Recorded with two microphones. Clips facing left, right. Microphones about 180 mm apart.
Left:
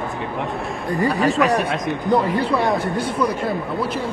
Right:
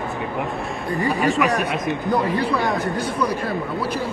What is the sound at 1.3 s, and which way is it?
Speech, 35° left (ahead or behind).